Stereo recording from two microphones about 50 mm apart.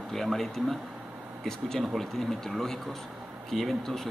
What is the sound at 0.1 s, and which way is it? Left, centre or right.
Speech, centre.